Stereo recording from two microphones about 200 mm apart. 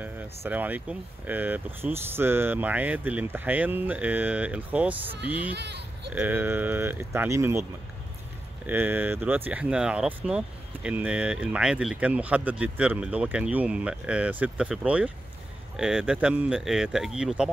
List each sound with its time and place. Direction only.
0.0 s speech: 10° right (ahead or behind)
5.5 s speech: 55° right (ahead or behind)
6.1 s speech: 10° right (ahead or behind)
8.6 s speech: 10° right (ahead or behind)